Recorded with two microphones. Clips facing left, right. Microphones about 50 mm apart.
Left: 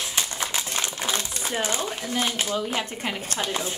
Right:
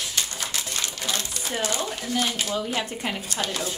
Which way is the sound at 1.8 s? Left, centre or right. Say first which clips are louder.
Even; left.